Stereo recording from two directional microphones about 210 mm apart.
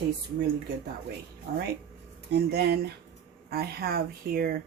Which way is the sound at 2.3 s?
50° right (ahead or behind).